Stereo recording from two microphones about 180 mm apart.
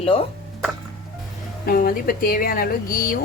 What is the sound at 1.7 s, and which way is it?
Speech, 55° left (ahead or behind).